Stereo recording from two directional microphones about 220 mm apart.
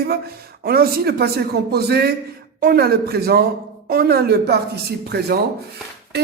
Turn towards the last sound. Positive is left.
turn(degrees=-50)  # may be behind; listen again after turning